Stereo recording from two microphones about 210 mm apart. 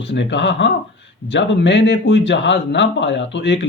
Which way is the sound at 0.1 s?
55° left (ahead or behind).